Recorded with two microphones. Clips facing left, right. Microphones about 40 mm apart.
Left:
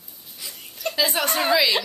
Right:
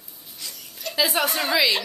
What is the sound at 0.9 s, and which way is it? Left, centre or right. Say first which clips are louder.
Speech: even; centre.